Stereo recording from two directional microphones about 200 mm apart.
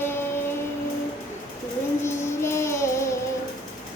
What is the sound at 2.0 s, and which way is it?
Music, 15° left (ahead or behind).